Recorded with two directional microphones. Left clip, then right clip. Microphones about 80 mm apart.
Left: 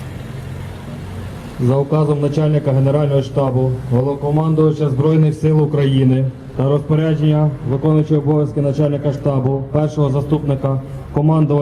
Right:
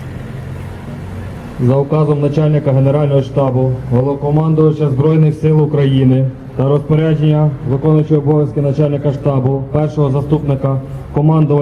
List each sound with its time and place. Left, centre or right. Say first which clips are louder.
1.5 s a man's voice: right 3 dB; left